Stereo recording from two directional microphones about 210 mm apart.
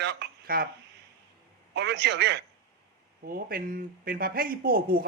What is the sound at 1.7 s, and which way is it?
A man's voice, 55° right (ahead or behind).